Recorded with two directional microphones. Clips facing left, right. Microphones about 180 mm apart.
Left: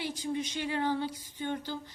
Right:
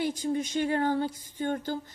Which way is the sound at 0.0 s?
45° right (ahead or behind).